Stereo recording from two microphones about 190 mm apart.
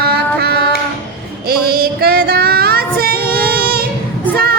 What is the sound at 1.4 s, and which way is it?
Female singing, 55° right (ahead or behind).